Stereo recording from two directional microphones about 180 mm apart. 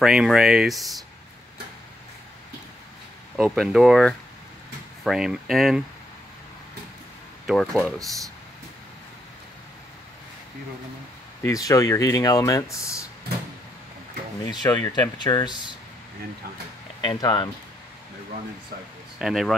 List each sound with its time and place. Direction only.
0.0 s speech: 5° right (ahead or behind)
3.3 s speech: 5° right (ahead or behind)
7.4 s speech: 5° left (ahead or behind)
11.4 s speech: 20° left (ahead or behind)
14.4 s speech: 20° left (ahead or behind)
17.0 s speech: 25° left (ahead or behind)
19.1 s speech: centre (ahead or behind)